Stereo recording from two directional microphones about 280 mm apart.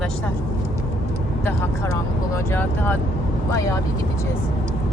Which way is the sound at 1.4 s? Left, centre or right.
Centre.